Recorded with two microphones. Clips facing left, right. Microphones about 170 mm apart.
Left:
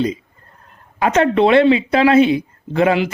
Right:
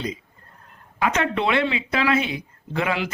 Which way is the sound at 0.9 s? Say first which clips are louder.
Left 8 dB; 40° left (ahead or behind).